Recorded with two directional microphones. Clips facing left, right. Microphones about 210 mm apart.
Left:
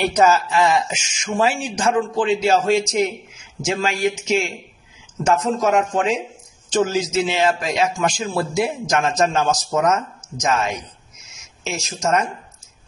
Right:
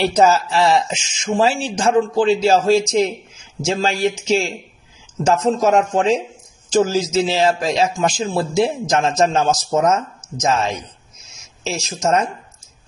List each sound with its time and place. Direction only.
0.1 s a man's voice: 30° right (ahead or behind)
12.0 s a man's voice: 30° right (ahead or behind)